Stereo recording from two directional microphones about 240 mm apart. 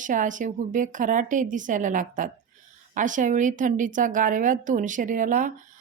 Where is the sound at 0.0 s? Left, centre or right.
Right.